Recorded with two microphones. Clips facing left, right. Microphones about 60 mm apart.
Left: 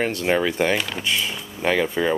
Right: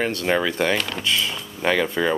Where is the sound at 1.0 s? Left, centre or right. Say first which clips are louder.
Right 1 dB; centre.